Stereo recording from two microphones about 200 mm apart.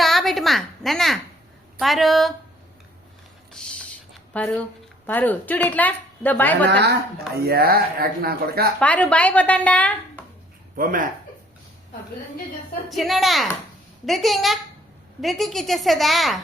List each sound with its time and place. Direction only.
0.0 s a sound: centre (ahead or behind)
1.8 s a woman's voice: centre (ahead or behind)
3.5 s a sound: 5° left (ahead or behind)
4.4 s a woman's voice: 5° left (ahead or behind)
6.7 s speech: 55° right (ahead or behind)
8.8 s a woman's voice: 5° left (ahead or behind)
10.8 s speech: 45° right (ahead or behind)
12.9 s a woman's voice: centre (ahead or behind)